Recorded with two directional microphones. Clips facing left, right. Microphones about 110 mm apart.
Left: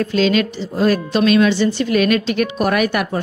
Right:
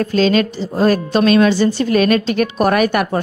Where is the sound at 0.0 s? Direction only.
40° right (ahead or behind).